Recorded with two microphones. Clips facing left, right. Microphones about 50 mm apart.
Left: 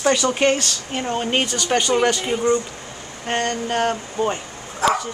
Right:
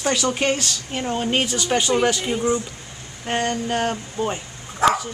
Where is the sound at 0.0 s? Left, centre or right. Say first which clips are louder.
Left 4 dB; centre.